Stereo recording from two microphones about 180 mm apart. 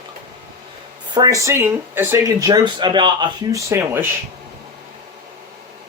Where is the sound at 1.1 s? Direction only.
20° right (ahead or behind).